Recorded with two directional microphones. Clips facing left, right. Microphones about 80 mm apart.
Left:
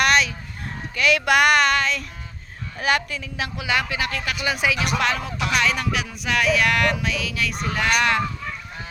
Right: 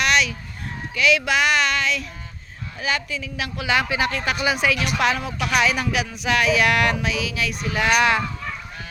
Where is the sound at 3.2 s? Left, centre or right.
Left.